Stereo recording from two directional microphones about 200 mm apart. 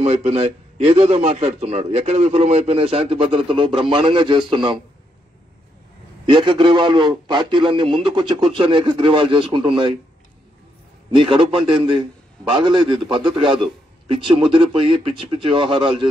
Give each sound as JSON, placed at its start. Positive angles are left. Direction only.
{"t": 0.0, "sound": "a man's voice", "side_deg": -30}
{"t": 6.2, "sound": "a man's voice", "side_deg": -25}
{"t": 11.1, "sound": "a man's voice", "side_deg": -25}